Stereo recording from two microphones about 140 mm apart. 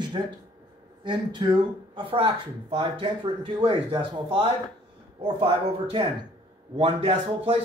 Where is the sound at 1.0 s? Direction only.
35° right (ahead or behind).